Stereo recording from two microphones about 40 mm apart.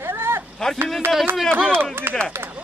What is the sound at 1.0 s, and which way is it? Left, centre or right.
Speech, right.